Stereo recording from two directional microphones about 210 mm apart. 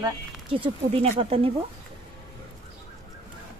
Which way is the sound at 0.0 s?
25° right (ahead or behind).